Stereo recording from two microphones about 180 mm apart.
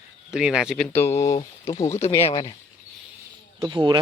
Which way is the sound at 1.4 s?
30° left (ahead or behind).